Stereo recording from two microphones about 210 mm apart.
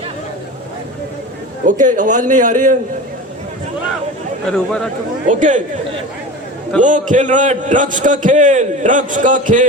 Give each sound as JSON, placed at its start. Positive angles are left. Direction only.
{"t": 1.6, "sound": "a man's voice", "side_deg": -35}
{"t": 4.5, "sound": "speech", "side_deg": 5}
{"t": 5.3, "sound": "a man's voice", "side_deg": -35}
{"t": 6.8, "sound": "a man's voice", "side_deg": -35}